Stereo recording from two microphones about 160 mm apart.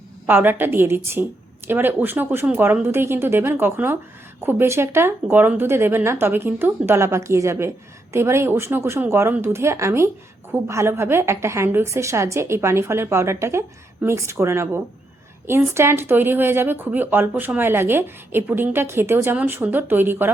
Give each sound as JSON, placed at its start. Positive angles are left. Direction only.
{"t": 0.3, "sound": "speech", "side_deg": -10}